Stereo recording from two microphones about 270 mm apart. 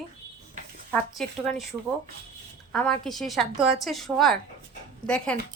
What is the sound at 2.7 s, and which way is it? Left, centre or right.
A woman's voice, centre.